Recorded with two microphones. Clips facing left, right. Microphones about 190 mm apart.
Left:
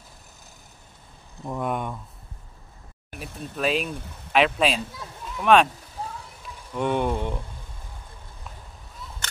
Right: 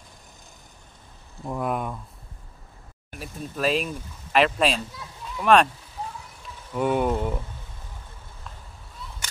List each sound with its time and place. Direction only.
1.4 s speech: centre (ahead or behind)
3.2 s speech: centre (ahead or behind)
6.7 s speech: 5° right (ahead or behind)
9.2 s single-lens reflex camera: 10° right (ahead or behind)